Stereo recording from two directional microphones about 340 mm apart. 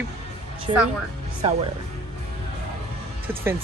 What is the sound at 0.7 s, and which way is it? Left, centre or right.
Speech, centre.